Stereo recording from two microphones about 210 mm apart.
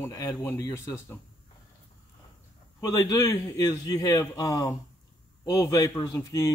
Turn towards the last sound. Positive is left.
turn(degrees=15)  # may be behind; listen again after turning